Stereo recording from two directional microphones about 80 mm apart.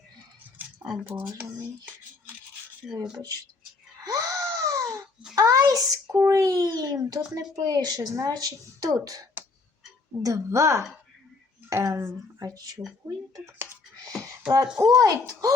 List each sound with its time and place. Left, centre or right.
0.6 s a sound: right
1.5 s music: right
2.8 s speech: centre
3.2 s speech: right
4.0 s a sound: right
5.3 s a child's voice: right
9.4 s a sound: right
10.2 s a woman's voice: right
12.5 s speech: right
14.5 s speech: right